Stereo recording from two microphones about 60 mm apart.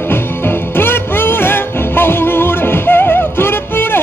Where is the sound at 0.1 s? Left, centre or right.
Left.